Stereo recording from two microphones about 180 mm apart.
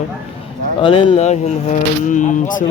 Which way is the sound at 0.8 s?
30° left (ahead or behind).